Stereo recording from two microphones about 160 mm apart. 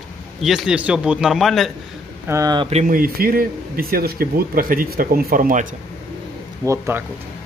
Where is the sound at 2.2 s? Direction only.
20° right (ahead or behind).